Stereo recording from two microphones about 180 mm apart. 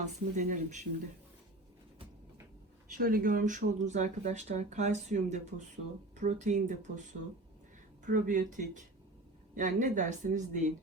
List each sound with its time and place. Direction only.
0.0 s speech: 45° right (ahead or behind)
2.9 s speech: 50° right (ahead or behind)